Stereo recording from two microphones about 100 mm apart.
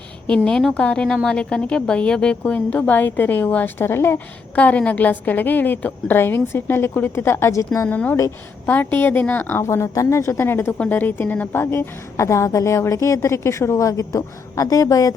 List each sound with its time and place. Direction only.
0.3 s a woman's voice: 10° left (ahead or behind); by 7.9 s 30° left (ahead or behind)
7.9 s a woman's voice: 15° left (ahead or behind); by 15.1 s 35° left (ahead or behind)